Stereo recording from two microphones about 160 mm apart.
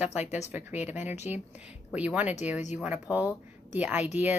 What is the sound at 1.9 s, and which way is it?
A woman's voice, 10° right (ahead or behind).